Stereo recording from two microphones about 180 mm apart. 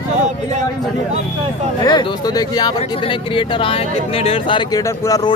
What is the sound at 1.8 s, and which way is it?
Speech, 25° left (ahead or behind).